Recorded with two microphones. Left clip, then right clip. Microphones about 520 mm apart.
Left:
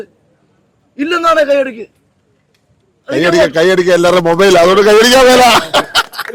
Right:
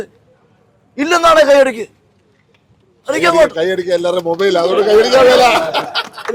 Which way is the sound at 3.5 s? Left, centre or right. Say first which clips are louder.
Left 6 dB; left.